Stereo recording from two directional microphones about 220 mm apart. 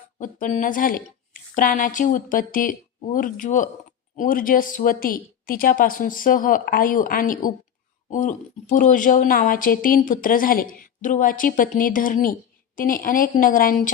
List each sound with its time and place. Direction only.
0.2 s a woman's voice: 35° left (ahead or behind)